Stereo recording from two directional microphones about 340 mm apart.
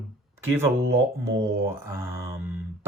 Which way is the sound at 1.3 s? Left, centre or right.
Centre.